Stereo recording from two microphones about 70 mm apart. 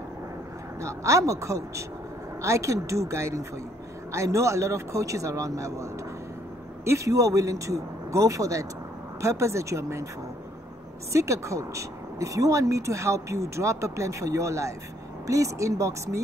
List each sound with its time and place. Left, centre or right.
0.7 s speech: right
11.1 s speech: right